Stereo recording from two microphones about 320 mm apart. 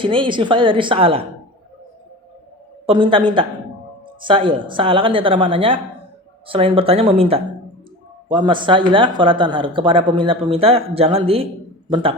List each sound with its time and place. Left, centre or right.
0.0 s speech: centre
2.8 s a man's voice: centre